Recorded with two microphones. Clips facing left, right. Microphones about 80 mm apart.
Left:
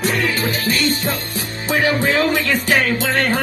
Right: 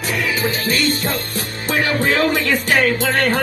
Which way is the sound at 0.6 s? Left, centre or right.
Right.